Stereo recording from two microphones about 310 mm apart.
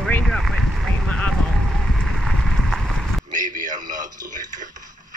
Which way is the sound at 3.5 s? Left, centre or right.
Right.